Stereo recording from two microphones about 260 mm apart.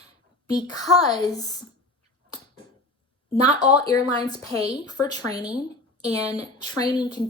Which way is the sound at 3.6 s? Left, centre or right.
Centre.